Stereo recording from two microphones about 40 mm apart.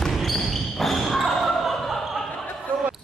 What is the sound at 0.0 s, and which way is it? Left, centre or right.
Basketball bounce, centre.